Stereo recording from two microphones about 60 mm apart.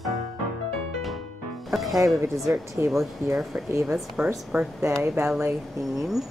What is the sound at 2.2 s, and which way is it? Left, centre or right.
Speech, right.